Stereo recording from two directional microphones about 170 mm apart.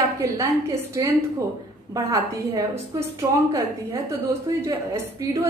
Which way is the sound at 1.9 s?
20° right (ahead or behind).